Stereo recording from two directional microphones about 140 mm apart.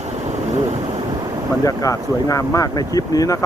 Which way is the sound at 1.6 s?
25° left (ahead or behind).